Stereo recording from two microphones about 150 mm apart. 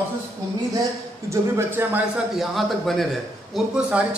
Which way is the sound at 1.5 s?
15° right (ahead or behind).